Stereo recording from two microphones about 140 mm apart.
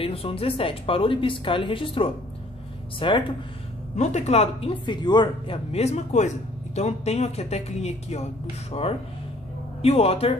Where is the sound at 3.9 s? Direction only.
55° left (ahead or behind).